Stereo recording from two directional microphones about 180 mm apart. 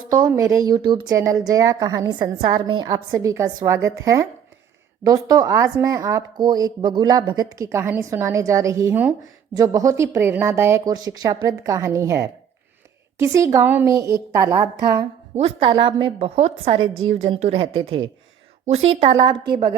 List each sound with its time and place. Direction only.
0.1 s a woman's voice: 20° right (ahead or behind)
15.4 s a woman's voice: 30° right (ahead or behind)